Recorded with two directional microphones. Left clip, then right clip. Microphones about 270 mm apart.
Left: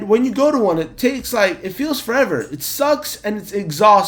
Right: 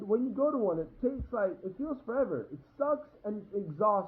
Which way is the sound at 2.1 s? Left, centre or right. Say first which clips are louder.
Left 14 dB; left.